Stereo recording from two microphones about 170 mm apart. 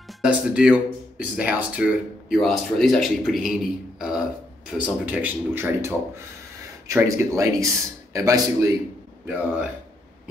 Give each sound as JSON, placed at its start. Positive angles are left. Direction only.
{"t": 0.2, "sound": "a man's voice", "side_deg": -5}
{"t": 9.2, "sound": "speech", "side_deg": -10}